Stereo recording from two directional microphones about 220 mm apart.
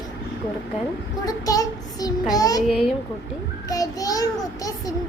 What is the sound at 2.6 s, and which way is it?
Speech, centre (ahead or behind).